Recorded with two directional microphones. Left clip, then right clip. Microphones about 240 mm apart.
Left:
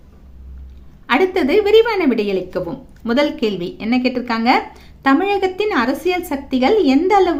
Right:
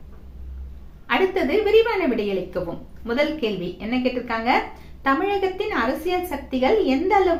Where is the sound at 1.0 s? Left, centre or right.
Left.